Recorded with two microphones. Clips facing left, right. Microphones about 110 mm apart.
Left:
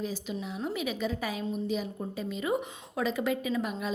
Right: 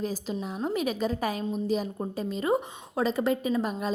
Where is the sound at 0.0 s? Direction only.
40° right (ahead or behind).